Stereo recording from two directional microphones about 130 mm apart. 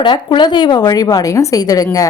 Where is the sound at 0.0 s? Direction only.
35° left (ahead or behind).